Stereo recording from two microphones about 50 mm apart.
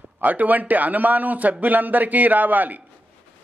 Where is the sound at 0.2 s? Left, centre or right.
Right.